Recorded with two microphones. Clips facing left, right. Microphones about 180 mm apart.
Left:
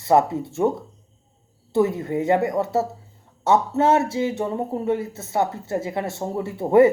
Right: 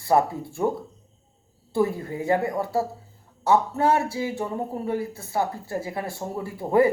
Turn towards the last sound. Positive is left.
turn(degrees=25)  # may be behind; listen again after turning